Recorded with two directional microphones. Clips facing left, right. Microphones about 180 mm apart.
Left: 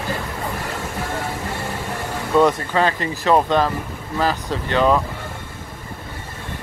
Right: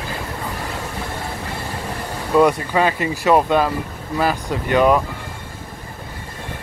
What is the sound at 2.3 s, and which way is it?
Speech, 10° right (ahead or behind).